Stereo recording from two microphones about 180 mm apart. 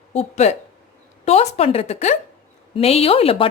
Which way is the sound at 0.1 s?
40° left (ahead or behind).